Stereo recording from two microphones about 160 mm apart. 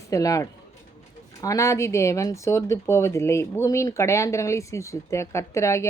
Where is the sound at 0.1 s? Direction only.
20° left (ahead or behind).